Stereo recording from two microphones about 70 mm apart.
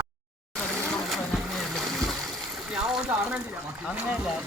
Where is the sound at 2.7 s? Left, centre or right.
Centre.